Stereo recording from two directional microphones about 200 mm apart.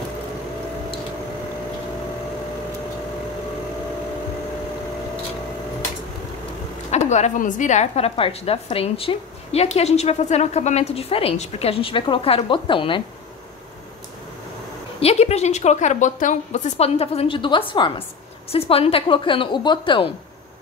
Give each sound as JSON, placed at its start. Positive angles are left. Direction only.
{"t": 6.9, "sound": "a woman's voice", "side_deg": 35}
{"t": 15.0, "sound": "a woman's voice", "side_deg": 30}